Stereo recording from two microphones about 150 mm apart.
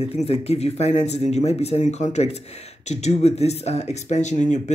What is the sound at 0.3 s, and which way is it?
Speech, 45° left (ahead or behind).